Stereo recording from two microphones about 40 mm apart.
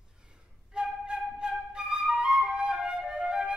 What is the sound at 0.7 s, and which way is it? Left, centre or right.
Flute, right.